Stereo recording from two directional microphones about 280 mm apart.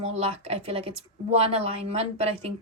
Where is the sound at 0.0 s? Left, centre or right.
Right.